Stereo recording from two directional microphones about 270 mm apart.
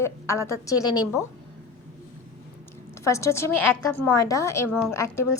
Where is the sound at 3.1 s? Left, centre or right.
Centre.